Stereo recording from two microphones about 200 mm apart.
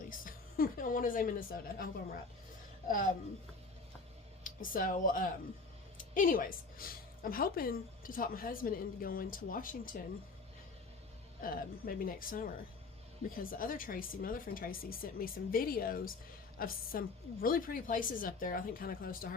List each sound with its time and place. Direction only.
0.1 s music: 45° left (ahead or behind)
2.8 s speech: 40° left (ahead or behind)
4.4 s a woman's voice: 45° left (ahead or behind)
11.4 s a woman's voice: 45° left (ahead or behind)